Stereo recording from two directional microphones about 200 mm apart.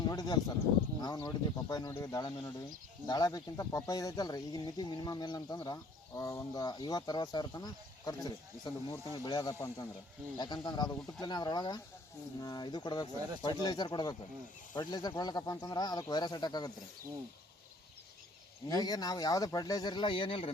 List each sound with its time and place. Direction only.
0.1 s a sound: 20° left (ahead or behind)
1.0 s speech: 20° left (ahead or behind)
18.7 s speech: 20° left (ahead or behind)